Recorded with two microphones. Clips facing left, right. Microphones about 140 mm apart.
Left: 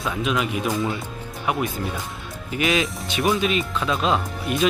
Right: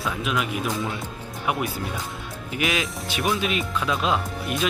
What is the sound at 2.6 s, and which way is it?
Speech, centre (ahead or behind).